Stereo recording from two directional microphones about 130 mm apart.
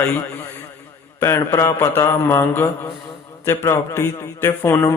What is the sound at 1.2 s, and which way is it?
A man's voice, 20° left (ahead or behind).